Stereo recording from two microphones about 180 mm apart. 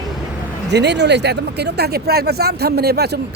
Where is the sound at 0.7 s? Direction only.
70° right (ahead or behind).